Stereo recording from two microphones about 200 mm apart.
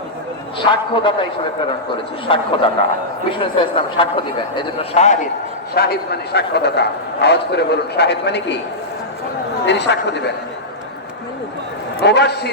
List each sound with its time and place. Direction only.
0.6 s a man's voice: 25° left (ahead or behind)
2.2 s a man's voice: 25° left (ahead or behind)
5.7 s a man's voice: 50° left (ahead or behind)
9.6 s a man's voice: 60° left (ahead or behind)
12.0 s a man's voice: 60° left (ahead or behind)